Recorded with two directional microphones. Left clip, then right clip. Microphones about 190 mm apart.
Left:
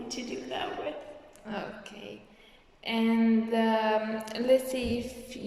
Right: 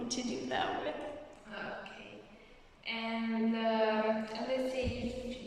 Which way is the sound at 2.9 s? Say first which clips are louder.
Left 9 dB; 35° left (ahead or behind).